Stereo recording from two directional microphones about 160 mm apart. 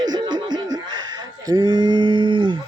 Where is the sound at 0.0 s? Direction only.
25° right (ahead or behind).